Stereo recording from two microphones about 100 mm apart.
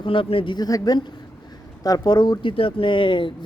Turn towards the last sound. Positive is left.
turn(degrees=55)  # may be behind; listen again after turning